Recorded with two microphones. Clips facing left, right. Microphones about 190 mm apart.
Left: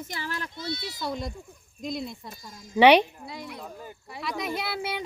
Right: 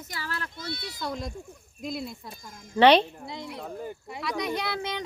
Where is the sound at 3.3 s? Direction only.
25° right (ahead or behind).